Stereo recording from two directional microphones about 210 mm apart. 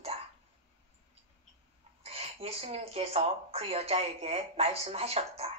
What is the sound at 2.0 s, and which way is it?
A woman's voice, 30° right (ahead or behind).